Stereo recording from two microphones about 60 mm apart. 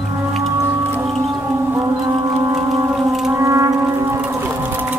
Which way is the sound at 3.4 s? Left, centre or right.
Right.